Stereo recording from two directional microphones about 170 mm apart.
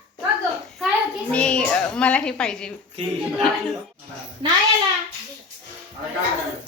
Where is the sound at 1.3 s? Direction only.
5° left (ahead or behind).